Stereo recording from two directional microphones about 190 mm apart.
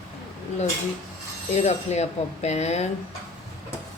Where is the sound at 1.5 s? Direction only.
35° left (ahead or behind).